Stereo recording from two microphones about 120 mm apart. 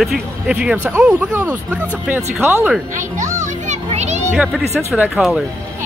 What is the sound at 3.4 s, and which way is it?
Children playing, 85° right.